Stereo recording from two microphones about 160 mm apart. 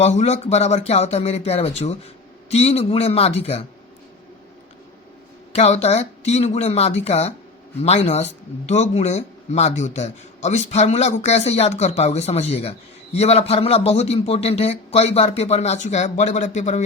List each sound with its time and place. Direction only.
0.0 s a man's voice: 40° left (ahead or behind)
5.5 s a man's voice: 45° left (ahead or behind)